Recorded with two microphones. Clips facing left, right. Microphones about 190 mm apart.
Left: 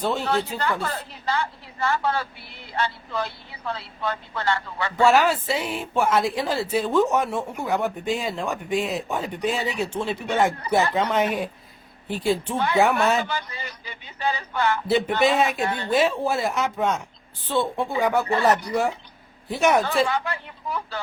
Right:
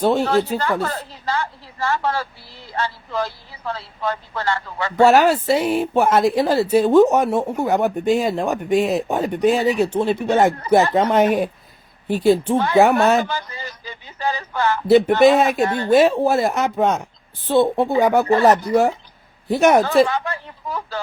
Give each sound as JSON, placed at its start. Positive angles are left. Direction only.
{"t": 0.0, "sound": "speech", "side_deg": -40}
{"t": 3.8, "sound": "speech", "side_deg": -30}
{"t": 10.8, "sound": "speech", "side_deg": -60}
{"t": 11.1, "sound": "speech", "side_deg": -45}
{"t": 15.0, "sound": "speech", "side_deg": -50}